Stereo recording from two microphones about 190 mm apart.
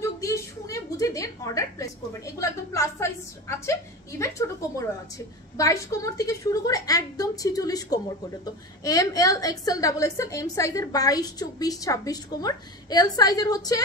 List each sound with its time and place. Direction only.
0.0 s a woman's voice: 15° left (ahead or behind)